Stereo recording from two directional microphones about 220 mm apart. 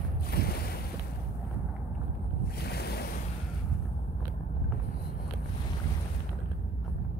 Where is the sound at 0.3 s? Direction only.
45° left (ahead or behind).